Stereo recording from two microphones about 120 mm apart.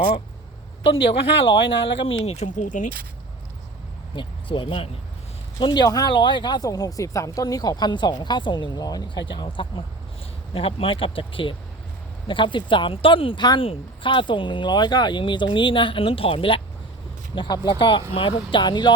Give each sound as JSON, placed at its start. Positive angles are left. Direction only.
{"t": 0.8, "sound": "speech", "side_deg": 50}
{"t": 4.1, "sound": "speech", "side_deg": 45}
{"t": 17.3, "sound": "speech", "side_deg": 40}